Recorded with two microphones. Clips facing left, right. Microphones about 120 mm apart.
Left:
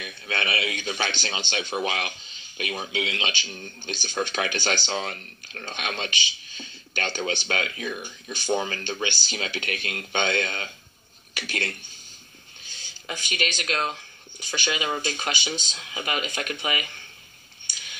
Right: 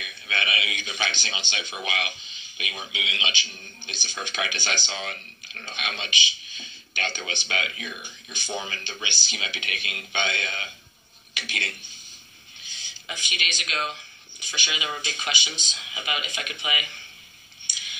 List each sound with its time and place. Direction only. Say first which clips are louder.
0.0 s a man's voice: left 2 dB; 40° left (ahead or behind)
12.7 s a man's voice: left 3 dB; 45° left (ahead or behind)